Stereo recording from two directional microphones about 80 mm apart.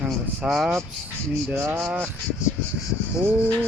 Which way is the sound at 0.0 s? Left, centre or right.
Centre.